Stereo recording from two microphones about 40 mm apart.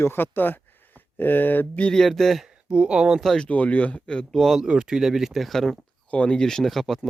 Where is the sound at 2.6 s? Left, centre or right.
Right.